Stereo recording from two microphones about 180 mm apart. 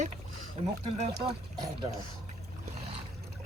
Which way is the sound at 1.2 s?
25° right (ahead or behind).